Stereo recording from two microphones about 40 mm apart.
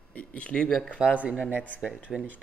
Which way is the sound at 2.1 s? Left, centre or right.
Centre.